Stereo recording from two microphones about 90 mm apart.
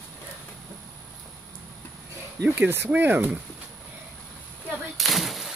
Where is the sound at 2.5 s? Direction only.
20° right (ahead or behind).